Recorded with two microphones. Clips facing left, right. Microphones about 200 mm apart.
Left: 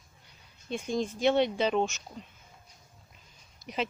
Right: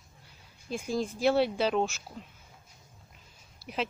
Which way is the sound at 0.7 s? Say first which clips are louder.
Left 1 dB; centre (ahead or behind).